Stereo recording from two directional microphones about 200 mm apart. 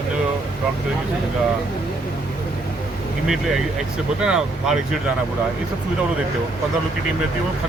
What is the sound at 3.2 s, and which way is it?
Speech, centre (ahead or behind).